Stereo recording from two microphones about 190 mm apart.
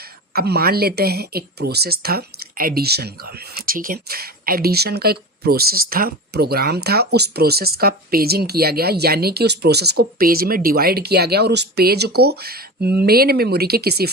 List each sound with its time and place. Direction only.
0.3 s speech: 55° right (ahead or behind)